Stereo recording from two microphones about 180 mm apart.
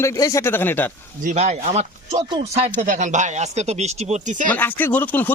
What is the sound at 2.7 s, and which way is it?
Speech, 50° right (ahead or behind).